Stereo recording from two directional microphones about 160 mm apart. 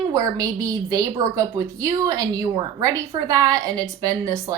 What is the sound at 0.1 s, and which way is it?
A woman's voice, 20° right (ahead or behind).